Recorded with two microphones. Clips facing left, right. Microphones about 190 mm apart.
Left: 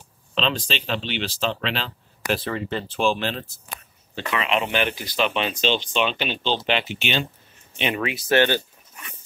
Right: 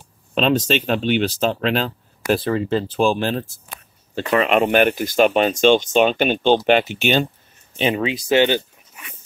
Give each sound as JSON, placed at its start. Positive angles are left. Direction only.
{"t": 0.3, "sound": "speech", "side_deg": -50}
{"t": 7.7, "sound": "speech", "side_deg": -30}